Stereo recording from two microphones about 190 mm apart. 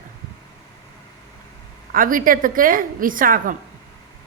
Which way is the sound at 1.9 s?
45° right (ahead or behind).